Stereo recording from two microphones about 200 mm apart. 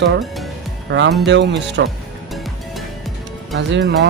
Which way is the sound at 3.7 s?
60° right (ahead or behind).